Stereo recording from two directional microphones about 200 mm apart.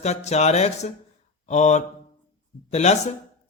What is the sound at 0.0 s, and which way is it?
A man's voice, 35° left (ahead or behind).